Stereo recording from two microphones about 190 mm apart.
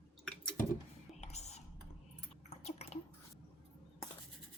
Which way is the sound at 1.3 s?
35° left (ahead or behind).